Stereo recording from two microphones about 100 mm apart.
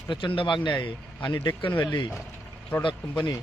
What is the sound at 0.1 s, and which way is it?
A man's voice, 60° left (ahead or behind).